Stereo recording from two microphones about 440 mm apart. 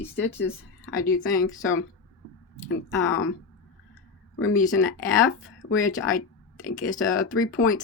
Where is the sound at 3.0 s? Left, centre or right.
Left.